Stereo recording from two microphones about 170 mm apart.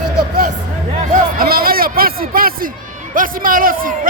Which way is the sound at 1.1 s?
60° right (ahead or behind).